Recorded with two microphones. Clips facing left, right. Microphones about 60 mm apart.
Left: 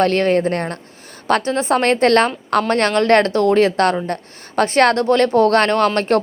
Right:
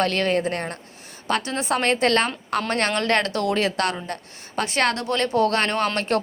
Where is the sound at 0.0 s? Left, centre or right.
Left.